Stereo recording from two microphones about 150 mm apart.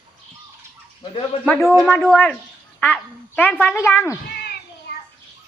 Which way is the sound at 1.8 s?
5° left (ahead or behind).